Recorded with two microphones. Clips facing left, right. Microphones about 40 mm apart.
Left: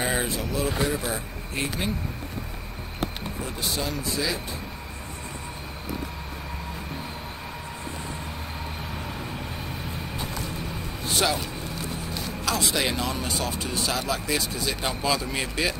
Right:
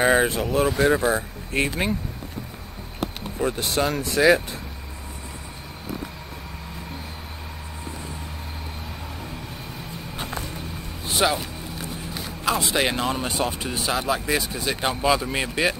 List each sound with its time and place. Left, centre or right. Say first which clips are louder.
0.0 s speech: right 8 dB; right
3.3 s speech: right 8 dB; right
11.2 s speech: right 4 dB; centre